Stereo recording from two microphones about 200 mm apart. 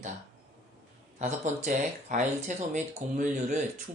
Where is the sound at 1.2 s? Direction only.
35° right (ahead or behind).